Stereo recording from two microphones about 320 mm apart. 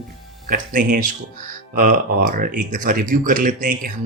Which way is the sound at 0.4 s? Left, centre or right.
Right.